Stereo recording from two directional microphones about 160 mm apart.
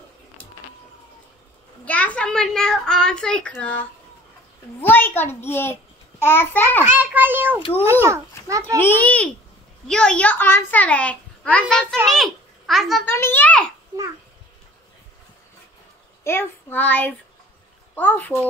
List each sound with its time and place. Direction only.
1.9 s speech: 10° left (ahead or behind)
4.8 s a child's voice: 15° left (ahead or behind)
6.8 s a child's voice: 10° right (ahead or behind)
8.7 s a child's voice: 10° left (ahead or behind)
11.6 s a child's voice: 10° right (ahead or behind)
12.1 s a child's voice: centre (ahead or behind)
13.0 s a child's voice: 15° left (ahead or behind)
13.9 s babbling: 20° right (ahead or behind)
16.3 s a child's voice: 15° left (ahead or behind)